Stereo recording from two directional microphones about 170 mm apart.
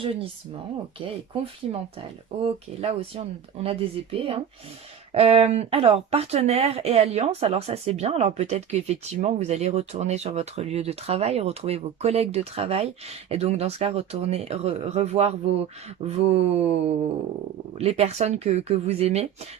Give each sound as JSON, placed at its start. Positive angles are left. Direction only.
{"t": 0.0, "sound": "speech", "side_deg": -35}
{"t": 1.7, "sound": "speech", "side_deg": -35}